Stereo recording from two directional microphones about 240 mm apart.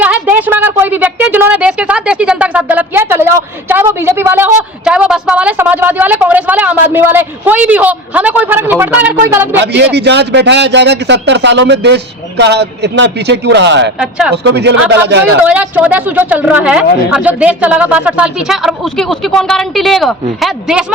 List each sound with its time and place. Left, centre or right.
0.0 s a sound: centre
9.6 s a man's voice: right
14.0 s a woman's voice: centre
14.4 s a man's voice: right
15.4 s a woman's voice: centre